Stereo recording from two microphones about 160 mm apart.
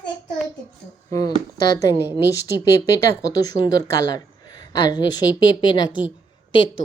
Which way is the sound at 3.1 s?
20° left (ahead or behind).